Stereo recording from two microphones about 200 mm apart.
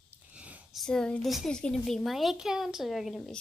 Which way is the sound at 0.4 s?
5° right (ahead or behind).